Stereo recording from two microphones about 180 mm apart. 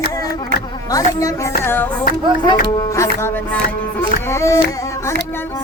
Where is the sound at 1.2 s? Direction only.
20° left (ahead or behind).